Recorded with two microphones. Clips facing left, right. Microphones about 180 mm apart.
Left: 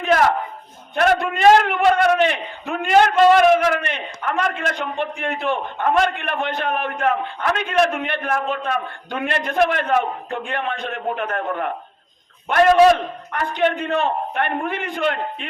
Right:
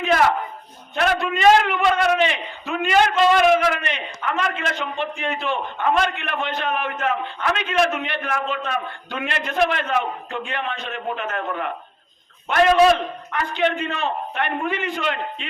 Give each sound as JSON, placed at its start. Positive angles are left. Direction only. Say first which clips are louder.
{"t": 0.9, "sound": "a man's voice", "louder": "left 3 dB", "side_deg": 50}